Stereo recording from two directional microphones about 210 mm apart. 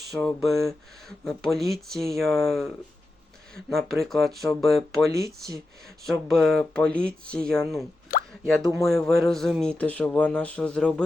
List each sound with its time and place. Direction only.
0.1 s a sound: centre (ahead or behind)
0.4 s speech: centre (ahead or behind)
5.0 s speech: 15° right (ahead or behind)
6.1 s speech: centre (ahead or behind)
8.1 s plop: 40° left (ahead or behind)
8.7 s speech: centre (ahead or behind)